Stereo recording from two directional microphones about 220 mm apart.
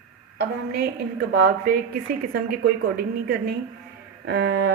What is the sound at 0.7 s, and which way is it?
Speech, 45° right (ahead or behind).